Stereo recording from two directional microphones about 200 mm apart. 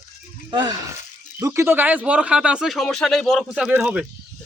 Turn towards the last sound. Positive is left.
turn(degrees=-5)  # may be behind; listen again after turning